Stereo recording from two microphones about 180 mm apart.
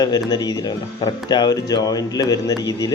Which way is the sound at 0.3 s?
20° left (ahead or behind).